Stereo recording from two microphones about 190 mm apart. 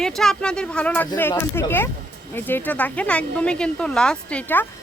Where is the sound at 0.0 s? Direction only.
5° left (ahead or behind).